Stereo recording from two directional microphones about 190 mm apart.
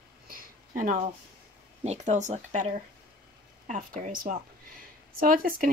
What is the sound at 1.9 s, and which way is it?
Speech, 40° right (ahead or behind).